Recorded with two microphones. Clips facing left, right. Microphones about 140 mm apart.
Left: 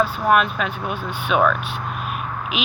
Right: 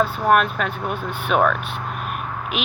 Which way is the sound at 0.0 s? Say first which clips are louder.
Even; 55° right (ahead or behind).